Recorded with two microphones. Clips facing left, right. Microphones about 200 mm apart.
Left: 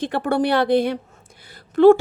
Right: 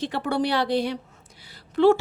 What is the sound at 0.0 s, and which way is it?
A woman's voice, 50° left (ahead or behind).